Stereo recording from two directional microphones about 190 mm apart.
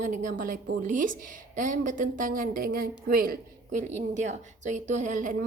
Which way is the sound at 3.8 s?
40° right (ahead or behind).